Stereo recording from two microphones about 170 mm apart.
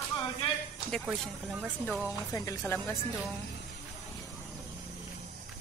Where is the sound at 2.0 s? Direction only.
20° left (ahead or behind).